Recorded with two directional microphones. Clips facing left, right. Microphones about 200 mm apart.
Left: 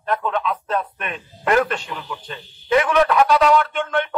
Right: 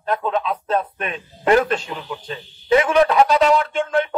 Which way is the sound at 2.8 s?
30° right (ahead or behind).